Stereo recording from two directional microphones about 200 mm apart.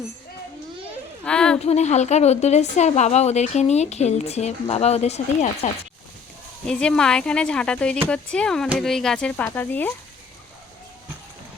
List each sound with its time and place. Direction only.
1.2 s speech: 5° left (ahead or behind)
1.5 s a woman's voice: 35° left (ahead or behind)
6.7 s speech: 5° left (ahead or behind)